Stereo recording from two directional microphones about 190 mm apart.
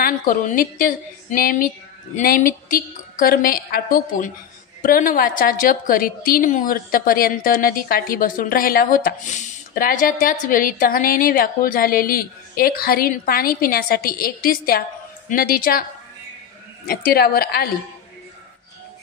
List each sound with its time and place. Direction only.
0.0 s a woman's voice: 45° left (ahead or behind)
16.8 s a woman's voice: 50° left (ahead or behind)